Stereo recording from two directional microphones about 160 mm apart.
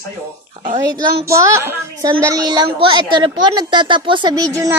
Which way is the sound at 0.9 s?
20° right (ahead or behind).